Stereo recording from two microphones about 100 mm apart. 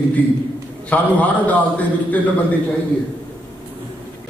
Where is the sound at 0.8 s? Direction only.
15° left (ahead or behind).